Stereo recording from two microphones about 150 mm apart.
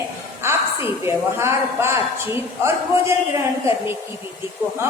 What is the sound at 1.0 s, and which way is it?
A man's voice, 15° right (ahead or behind).